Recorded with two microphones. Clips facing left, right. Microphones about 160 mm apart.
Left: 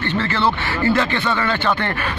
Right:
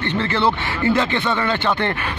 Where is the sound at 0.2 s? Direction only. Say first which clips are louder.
Right 2 dB; 20° right (ahead or behind).